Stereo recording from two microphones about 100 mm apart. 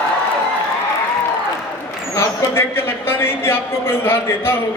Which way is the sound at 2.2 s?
25° left (ahead or behind).